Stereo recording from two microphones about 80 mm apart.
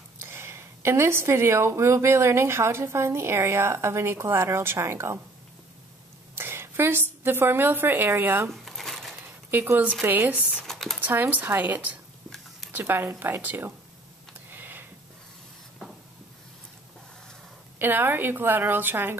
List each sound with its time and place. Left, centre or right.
0.2 s speech: right
6.3 s a woman's voice: right
8.5 s a sound: centre
9.5 s a woman's voice: right
10.6 s speech: centre
11.0 s a woman's voice: right
14.5 s a sound: right
17.7 s a woman's voice: right